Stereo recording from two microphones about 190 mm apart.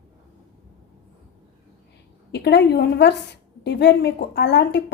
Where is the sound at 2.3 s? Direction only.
60° left (ahead or behind).